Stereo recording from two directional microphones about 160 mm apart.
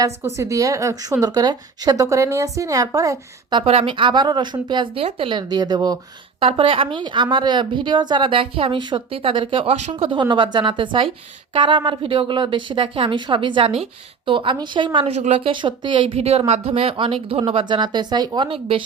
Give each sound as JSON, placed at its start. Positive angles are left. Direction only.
{"t": 0.0, "sound": "a woman's voice", "side_deg": -20}
{"t": 3.6, "sound": "a woman's voice", "side_deg": -35}
{"t": 10.1, "sound": "a woman's voice", "side_deg": -30}
{"t": 15.5, "sound": "a woman's voice", "side_deg": -30}